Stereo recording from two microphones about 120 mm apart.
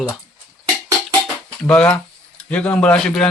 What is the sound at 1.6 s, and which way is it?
Speech, 5° left (ahead or behind).